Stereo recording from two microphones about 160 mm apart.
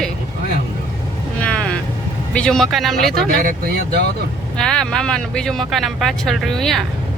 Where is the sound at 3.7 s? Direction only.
90° right.